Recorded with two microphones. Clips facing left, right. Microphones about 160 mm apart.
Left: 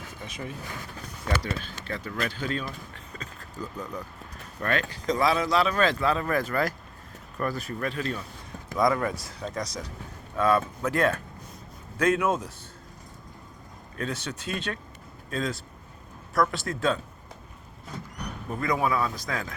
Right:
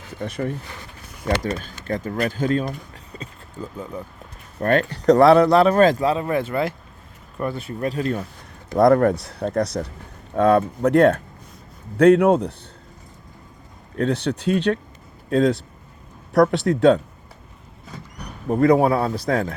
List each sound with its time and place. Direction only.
0.2 s speech: 60° right (ahead or behind)
1.4 s speech: 45° right (ahead or behind)
2.6 s a sound: 40° right (ahead or behind)
4.6 s speech: 50° right (ahead or behind)
8.8 s speech: 60° right (ahead or behind)
13.9 s speech: 65° right (ahead or behind)
18.5 s speech: 60° right (ahead or behind)
18.8 s speech: 35° right (ahead or behind)
19.3 s speech: 60° right (ahead or behind)